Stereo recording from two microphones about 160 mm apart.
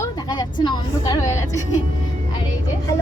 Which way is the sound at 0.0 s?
25° left (ahead or behind).